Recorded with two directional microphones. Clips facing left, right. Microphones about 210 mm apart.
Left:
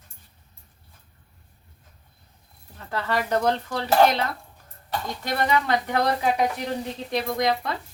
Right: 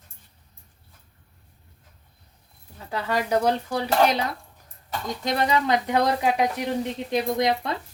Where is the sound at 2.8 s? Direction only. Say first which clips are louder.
Even; 10° right (ahead or behind).